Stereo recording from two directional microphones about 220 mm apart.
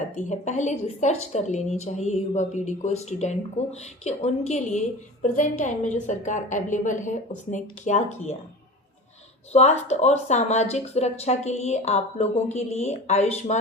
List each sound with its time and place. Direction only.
0.2 s a woman's voice: 35° left (ahead or behind)
9.5 s speech: 30° left (ahead or behind)